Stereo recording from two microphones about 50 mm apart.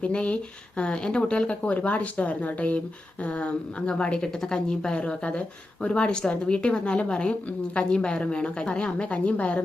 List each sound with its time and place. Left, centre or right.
0.0 s a woman's voice: left